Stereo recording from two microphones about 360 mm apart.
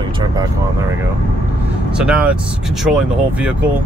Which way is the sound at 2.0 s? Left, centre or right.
Centre.